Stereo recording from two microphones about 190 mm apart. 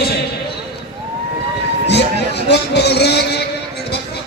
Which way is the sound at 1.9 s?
65° left (ahead or behind).